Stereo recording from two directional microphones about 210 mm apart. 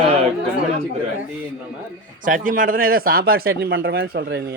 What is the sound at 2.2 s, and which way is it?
Speech, 40° right (ahead or behind).